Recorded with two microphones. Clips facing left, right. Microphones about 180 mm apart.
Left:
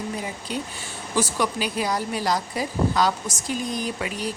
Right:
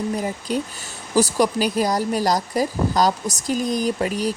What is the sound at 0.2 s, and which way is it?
Speech, 45° right (ahead or behind).